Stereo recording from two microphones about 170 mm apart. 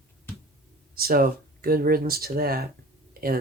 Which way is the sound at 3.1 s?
60° right (ahead or behind).